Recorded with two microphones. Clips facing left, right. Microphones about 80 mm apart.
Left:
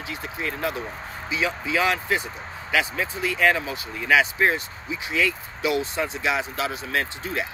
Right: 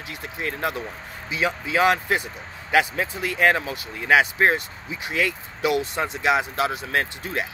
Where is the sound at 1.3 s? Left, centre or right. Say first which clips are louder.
Right 1 dB; right.